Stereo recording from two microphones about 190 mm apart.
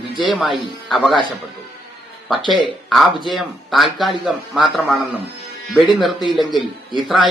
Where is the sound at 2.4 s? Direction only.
25° left (ahead or behind).